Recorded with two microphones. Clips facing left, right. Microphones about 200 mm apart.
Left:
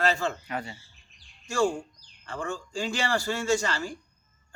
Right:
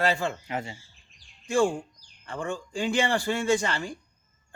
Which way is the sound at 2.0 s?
20° right (ahead or behind).